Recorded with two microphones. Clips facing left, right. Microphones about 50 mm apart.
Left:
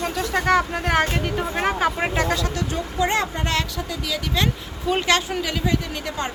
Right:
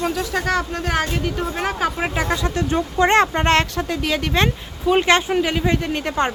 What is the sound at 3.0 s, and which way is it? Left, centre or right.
Speech, right.